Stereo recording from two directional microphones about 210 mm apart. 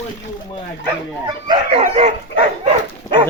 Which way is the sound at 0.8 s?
20° right (ahead or behind).